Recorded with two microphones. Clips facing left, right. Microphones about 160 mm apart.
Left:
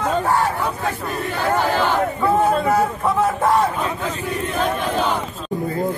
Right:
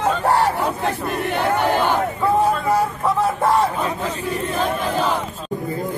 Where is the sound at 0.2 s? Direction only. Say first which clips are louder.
Right 2 dB; 35° right (ahead or behind).